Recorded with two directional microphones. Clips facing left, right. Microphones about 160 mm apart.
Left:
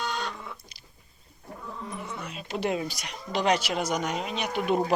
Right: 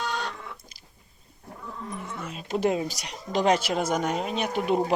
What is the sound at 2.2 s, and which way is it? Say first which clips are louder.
Speech: right 5 dB; 40° right (ahead or behind).